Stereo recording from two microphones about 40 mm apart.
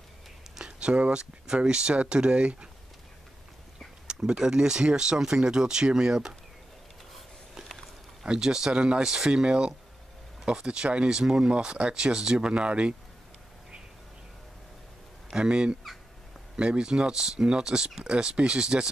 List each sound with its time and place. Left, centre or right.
0.7 s speech: right
4.3 s speech: centre
8.3 s speech: centre
8.7 s speech: right
15.2 s speech: centre